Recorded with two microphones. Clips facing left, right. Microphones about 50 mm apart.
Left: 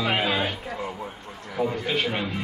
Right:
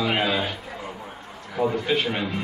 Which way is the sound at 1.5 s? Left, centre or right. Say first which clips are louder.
Right 3 dB; centre.